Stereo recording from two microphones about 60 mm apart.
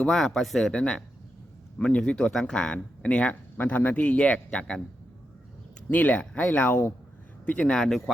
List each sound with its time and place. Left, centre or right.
0.1 s a man's voice: centre
5.9 s a man's voice: left
7.8 s speech: centre